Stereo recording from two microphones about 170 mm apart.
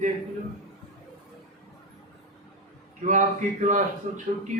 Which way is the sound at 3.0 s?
50° right (ahead or behind).